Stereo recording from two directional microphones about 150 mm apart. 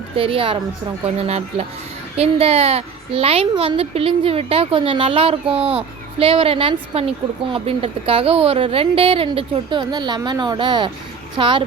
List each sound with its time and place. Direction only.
0.2 s a woman's voice: 35° right (ahead or behind)